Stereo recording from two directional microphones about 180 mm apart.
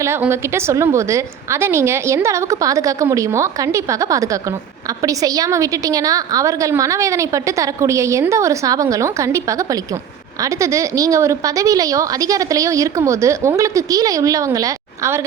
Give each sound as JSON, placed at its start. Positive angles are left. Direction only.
{"t": 0.0, "sound": "a woman's voice", "side_deg": -15}